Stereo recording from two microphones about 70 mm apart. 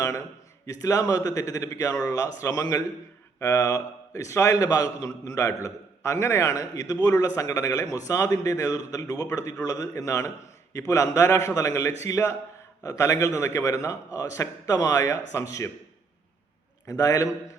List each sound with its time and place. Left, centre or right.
0.0 s a man's voice: left
16.8 s a man's voice: left